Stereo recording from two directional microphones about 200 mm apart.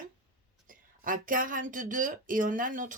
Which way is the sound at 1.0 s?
45° right (ahead or behind).